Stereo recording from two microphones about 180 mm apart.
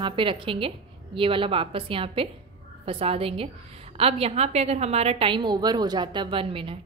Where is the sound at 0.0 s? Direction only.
30° right (ahead or behind).